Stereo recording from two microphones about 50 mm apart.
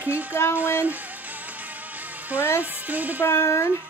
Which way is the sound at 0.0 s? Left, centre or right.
Right.